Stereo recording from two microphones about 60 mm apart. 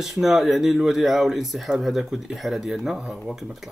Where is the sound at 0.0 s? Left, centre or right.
Centre.